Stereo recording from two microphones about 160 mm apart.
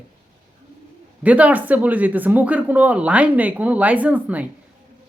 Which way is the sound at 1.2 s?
10° right (ahead or behind).